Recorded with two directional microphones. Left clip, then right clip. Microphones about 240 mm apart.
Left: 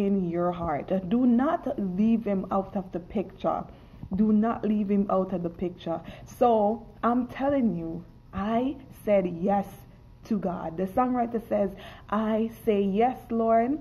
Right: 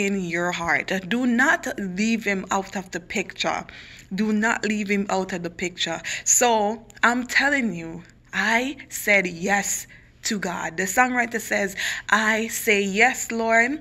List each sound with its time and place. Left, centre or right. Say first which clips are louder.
0.0 s speech: right 3 dB; centre